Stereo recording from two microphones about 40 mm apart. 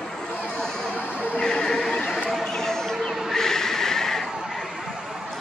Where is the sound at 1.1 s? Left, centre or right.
Right.